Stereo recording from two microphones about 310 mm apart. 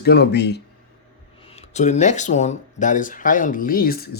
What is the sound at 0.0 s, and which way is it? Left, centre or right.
Speech, left.